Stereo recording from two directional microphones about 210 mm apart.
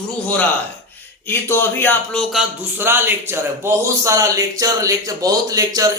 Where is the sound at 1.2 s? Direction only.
10° left (ahead or behind).